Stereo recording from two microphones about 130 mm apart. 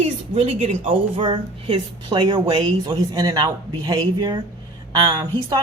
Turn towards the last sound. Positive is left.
turn(degrees=-35)  # may be behind; listen again after turning